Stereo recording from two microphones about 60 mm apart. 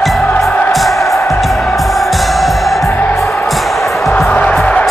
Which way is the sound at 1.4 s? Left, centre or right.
Centre.